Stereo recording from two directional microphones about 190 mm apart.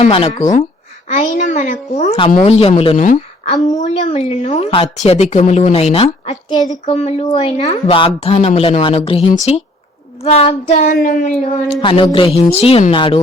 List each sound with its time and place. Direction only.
0.1 s a woman's voice: 30° left (ahead or behind)
6.9 s a woman's voice: 35° left (ahead or behind)
11.4 s a woman's voice: 30° left (ahead or behind)